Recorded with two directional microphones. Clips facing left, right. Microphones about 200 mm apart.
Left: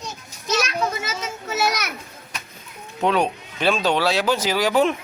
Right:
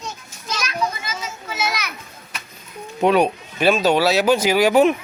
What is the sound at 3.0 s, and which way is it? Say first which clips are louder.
Speech: right 4 dB; 10° right (ahead or behind).